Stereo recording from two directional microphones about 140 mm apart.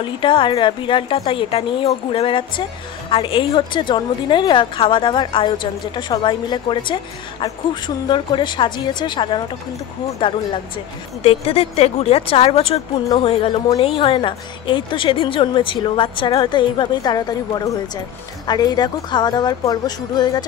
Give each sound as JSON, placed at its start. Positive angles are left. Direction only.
{"t": 0.0, "sound": "a woman's voice", "side_deg": 35}
{"t": 11.2, "sound": "a woman's voice", "side_deg": 45}